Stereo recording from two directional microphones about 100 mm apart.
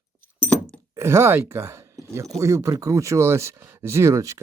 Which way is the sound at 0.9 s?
25° right (ahead or behind).